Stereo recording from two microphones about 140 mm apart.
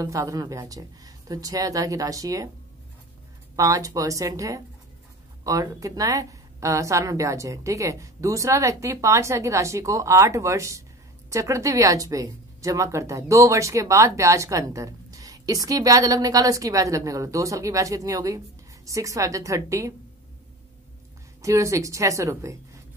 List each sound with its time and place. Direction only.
0.0 s speech: 25° right (ahead or behind)
3.5 s speech: 25° right (ahead or behind)
21.4 s speech: 20° right (ahead or behind)